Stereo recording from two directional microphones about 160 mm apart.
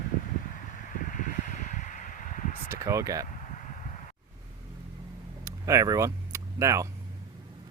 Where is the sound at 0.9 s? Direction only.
55° left (ahead or behind).